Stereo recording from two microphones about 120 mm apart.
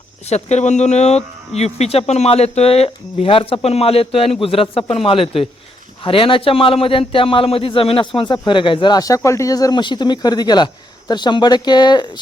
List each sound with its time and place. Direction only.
0.3 s a man's voice: 65° left (ahead or behind); by 12.2 s 40° left (ahead or behind)